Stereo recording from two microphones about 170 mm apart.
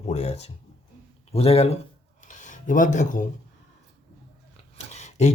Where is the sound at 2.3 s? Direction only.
45° left (ahead or behind).